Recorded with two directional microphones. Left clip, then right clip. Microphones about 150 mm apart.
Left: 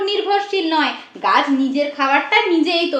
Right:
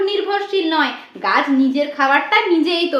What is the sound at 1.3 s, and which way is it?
A woman's voice, 10° right (ahead or behind).